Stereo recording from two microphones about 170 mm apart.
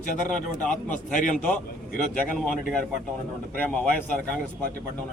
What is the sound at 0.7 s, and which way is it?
Speech, 50° left (ahead or behind).